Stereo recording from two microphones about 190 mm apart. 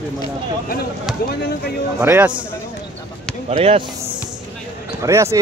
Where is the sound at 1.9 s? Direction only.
10° right (ahead or behind).